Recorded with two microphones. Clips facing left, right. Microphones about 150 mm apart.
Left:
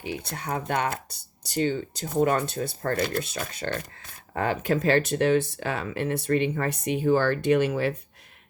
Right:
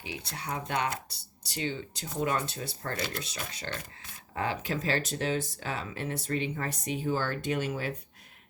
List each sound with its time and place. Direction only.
0.0 s speech: 50° left (ahead or behind); by 7.9 s 70° left (ahead or behind)